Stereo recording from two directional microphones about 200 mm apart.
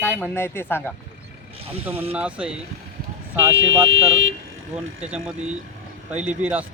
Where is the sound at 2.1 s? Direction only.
5° right (ahead or behind).